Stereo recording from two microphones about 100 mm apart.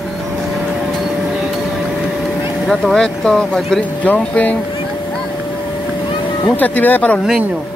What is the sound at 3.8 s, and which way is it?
Speech, 15° left (ahead or behind).